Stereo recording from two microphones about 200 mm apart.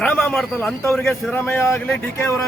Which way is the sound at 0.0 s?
10° left (ahead or behind).